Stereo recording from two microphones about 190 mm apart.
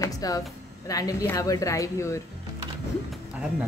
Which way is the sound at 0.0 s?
20° left (ahead or behind).